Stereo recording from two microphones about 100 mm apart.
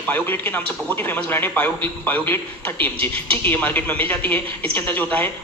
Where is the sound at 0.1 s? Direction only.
20° left (ahead or behind).